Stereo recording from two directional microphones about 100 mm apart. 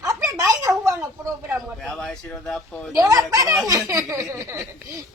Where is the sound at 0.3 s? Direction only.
30° right (ahead or behind).